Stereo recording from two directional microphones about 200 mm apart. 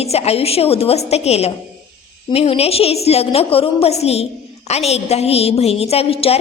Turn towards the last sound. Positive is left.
turn(degrees=30)  # may be behind; listen again after turning